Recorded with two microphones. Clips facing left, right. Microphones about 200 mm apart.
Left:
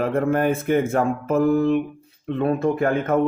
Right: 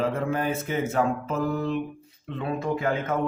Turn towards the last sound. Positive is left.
turn(degrees=55)  # may be behind; listen again after turning